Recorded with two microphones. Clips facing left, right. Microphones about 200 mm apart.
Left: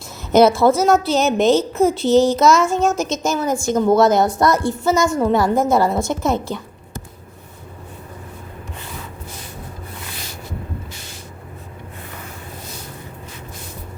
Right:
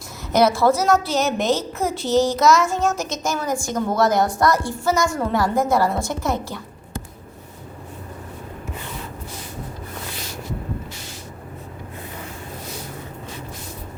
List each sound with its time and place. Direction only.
0.3 s a woman's voice: 25° left (ahead or behind)